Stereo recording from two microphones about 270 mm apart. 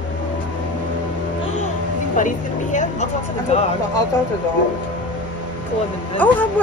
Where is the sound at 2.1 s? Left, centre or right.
Left.